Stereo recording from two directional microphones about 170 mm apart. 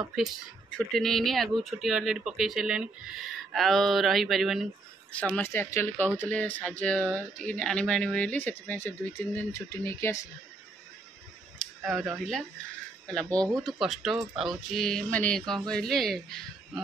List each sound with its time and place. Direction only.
0.7 s speech: centre (ahead or behind)
5.1 s speech: 10° left (ahead or behind)
11.8 s speech: centre (ahead or behind)
13.3 s speech: 20° right (ahead or behind)
13.7 s speech: centre (ahead or behind)